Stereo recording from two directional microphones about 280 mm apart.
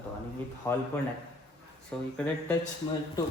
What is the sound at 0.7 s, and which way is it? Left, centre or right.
Speech, centre.